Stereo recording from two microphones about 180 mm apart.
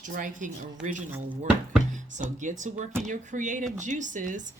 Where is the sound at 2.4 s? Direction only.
45° right (ahead or behind).